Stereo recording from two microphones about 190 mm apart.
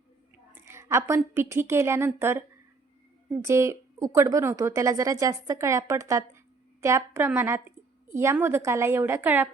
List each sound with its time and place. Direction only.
0.5 s a woman's voice: 15° right (ahead or behind)
3.4 s speech: 15° right (ahead or behind)